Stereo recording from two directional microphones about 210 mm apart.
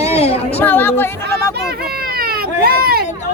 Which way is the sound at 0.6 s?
10° left (ahead or behind).